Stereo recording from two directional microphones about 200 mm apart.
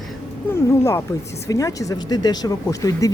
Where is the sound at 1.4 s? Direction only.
15° left (ahead or behind).